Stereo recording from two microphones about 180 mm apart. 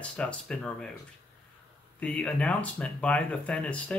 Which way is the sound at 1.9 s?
5° left (ahead or behind).